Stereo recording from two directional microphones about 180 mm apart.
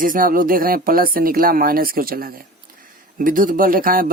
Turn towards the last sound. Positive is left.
turn(degrees=-50)  # may be behind; listen again after turning